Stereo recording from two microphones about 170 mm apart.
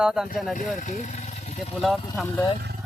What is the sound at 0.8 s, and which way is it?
Vehicle, 45° left (ahead or behind).